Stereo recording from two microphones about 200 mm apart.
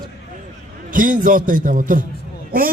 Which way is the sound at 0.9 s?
40° right (ahead or behind).